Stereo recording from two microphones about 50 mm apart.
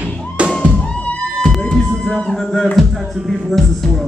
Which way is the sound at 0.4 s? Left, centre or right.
Right.